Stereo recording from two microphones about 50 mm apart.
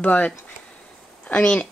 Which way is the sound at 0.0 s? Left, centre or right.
Left.